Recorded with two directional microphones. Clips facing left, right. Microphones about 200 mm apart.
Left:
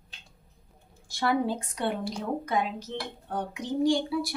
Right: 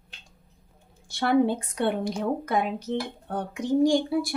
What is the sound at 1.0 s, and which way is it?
Speech, 60° right (ahead or behind).